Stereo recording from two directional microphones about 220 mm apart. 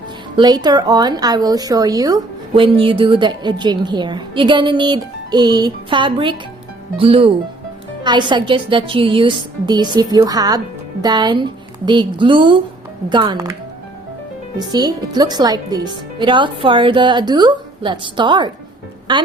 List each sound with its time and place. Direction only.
0.3 s a woman's voice: 20° right (ahead or behind)
14.6 s a woman's voice: 20° right (ahead or behind)